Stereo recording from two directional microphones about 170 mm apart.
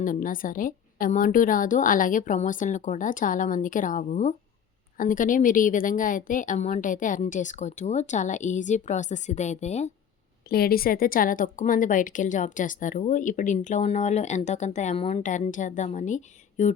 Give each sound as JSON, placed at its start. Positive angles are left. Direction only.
{"t": 0.0, "sound": "a woman's voice", "side_deg": 55}
{"t": 10.5, "sound": "a woman's voice", "side_deg": 60}